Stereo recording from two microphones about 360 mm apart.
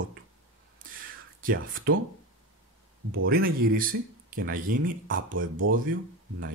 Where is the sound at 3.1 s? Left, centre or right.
Right.